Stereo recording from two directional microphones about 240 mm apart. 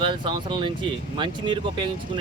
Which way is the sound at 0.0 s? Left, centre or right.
Centre.